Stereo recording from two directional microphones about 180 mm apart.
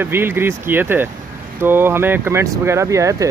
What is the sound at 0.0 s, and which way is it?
Speech, 10° right (ahead or behind).